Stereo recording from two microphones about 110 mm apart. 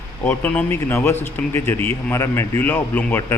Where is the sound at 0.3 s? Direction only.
15° left (ahead or behind).